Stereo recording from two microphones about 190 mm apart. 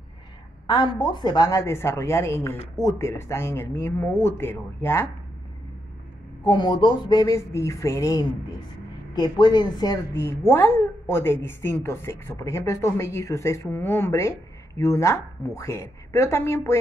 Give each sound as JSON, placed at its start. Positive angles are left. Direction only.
{"t": 0.7, "sound": "a woman's voice", "side_deg": 25}
{"t": 6.4, "sound": "a woman's voice", "side_deg": 20}